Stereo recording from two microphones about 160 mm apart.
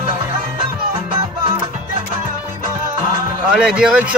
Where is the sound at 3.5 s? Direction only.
5° right (ahead or behind).